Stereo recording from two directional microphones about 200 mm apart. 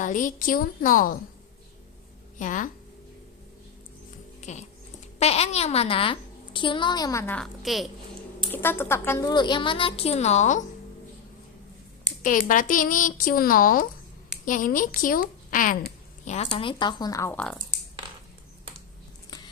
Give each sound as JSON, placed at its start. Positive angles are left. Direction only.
{"t": 0.0, "sound": "speech", "side_deg": 40}
{"t": 2.4, "sound": "a woman's voice", "side_deg": 40}
{"t": 4.4, "sound": "music", "side_deg": 35}
{"t": 5.2, "sound": "a child's voice", "side_deg": 30}
{"t": 8.5, "sound": "a child's voice", "side_deg": 10}
{"t": 12.2, "sound": "a woman's voice", "side_deg": 40}